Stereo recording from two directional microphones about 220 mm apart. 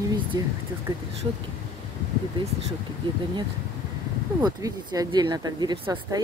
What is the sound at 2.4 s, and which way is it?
Speech, 20° right (ahead or behind).